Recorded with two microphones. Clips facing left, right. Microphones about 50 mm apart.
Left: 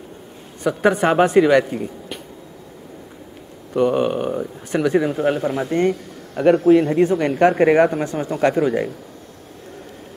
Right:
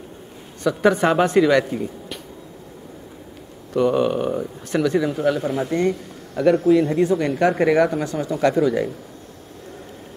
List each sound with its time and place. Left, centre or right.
0.9 s speech: centre
3.7 s speech: centre
4.9 s a man's voice: left